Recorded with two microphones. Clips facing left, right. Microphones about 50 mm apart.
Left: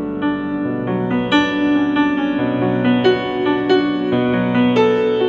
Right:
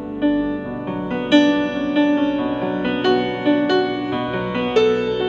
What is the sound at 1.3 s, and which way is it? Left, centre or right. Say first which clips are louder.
Music: right 1 dB; left.